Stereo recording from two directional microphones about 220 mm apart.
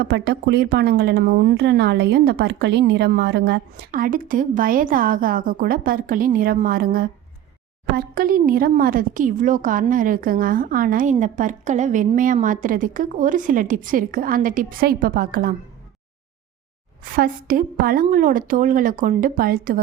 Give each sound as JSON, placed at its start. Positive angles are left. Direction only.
{"t": 0.0, "sound": "a woman's voice", "side_deg": -45}
{"t": 17.0, "sound": "a woman's voice", "side_deg": -40}